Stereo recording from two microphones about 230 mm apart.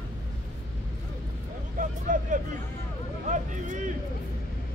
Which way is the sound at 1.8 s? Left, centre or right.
Right.